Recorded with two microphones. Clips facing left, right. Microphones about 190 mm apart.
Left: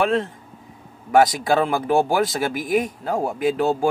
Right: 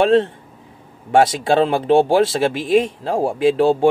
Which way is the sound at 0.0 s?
30° right (ahead or behind).